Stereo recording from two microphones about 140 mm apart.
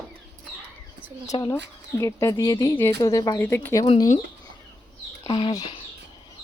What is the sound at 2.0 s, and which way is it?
Speech, 25° left (ahead or behind).